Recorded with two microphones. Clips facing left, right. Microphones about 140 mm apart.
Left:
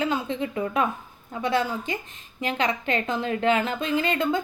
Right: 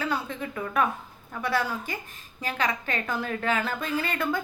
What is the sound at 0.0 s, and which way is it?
A woman's voice, 25° left (ahead or behind).